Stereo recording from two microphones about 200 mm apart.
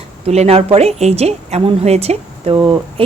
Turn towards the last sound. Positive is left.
turn(degrees=-25)  # may be behind; listen again after turning